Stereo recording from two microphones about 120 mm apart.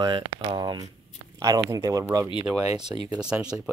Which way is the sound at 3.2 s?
5° right (ahead or behind).